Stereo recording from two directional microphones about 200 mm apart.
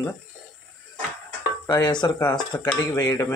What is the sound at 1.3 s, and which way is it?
Stir, 15° left (ahead or behind).